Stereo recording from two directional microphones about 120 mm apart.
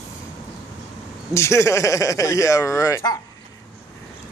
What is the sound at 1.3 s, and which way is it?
A man's voice, 25° left (ahead or behind).